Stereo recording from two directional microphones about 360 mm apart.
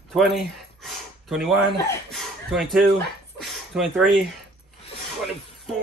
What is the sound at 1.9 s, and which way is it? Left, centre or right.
Speech, centre.